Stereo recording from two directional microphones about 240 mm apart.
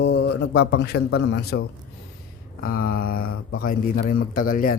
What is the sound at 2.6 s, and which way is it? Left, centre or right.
Speech, left.